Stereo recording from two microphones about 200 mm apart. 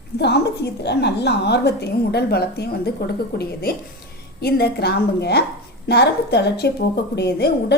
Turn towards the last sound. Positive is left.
turn(degrees=55)  # may be behind; listen again after turning